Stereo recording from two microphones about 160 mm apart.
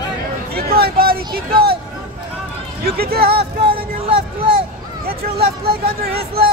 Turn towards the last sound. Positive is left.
turn(degrees=-75)  # may be behind; listen again after turning